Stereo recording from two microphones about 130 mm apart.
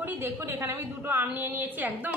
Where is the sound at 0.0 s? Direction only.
20° right (ahead or behind).